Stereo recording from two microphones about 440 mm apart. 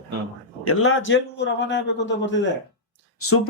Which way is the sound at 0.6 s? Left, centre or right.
Left.